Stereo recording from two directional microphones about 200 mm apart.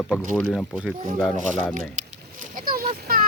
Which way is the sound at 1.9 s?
40° right (ahead or behind).